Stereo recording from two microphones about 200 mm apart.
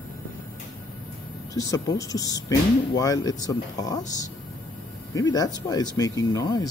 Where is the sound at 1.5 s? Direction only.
15° left (ahead or behind).